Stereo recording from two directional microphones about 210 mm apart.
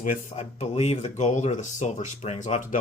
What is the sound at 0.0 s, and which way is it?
Speech, 35° left (ahead or behind).